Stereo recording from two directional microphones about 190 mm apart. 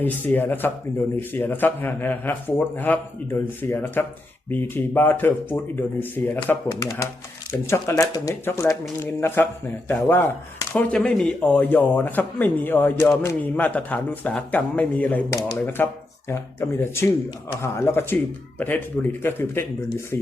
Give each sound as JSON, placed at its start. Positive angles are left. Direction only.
{"t": 0.0, "sound": "speech", "side_deg": 10}
{"t": 19.2, "sound": "speech", "side_deg": 10}